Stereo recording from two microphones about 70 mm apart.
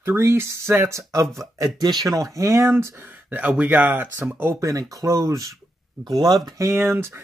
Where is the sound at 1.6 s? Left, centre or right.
Right.